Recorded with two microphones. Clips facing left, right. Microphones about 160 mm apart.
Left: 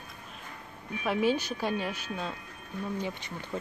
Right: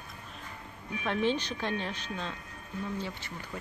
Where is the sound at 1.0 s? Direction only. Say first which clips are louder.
Left 2 dB; 10° left (ahead or behind).